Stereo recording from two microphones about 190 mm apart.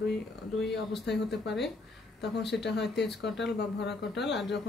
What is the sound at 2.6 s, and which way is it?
Speech, 65° left (ahead or behind).